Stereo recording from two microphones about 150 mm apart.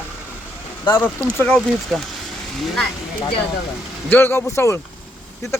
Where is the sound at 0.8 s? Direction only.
15° left (ahead or behind).